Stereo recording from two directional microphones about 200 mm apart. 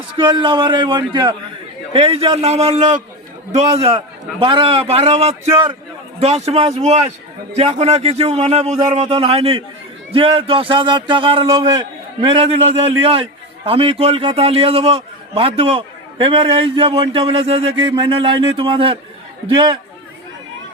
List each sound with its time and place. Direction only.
0.2 s a man's voice: 25° right (ahead or behind)